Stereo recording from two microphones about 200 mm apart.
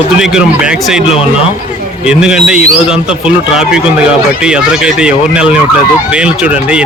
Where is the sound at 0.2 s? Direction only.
5° right (ahead or behind).